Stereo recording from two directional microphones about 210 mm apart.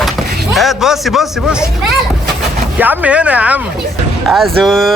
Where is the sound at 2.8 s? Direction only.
5° right (ahead or behind).